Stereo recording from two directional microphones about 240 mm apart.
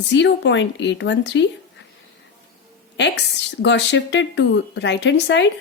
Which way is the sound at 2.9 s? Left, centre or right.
Left.